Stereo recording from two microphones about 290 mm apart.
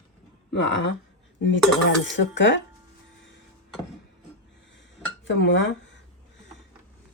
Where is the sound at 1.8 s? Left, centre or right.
Left.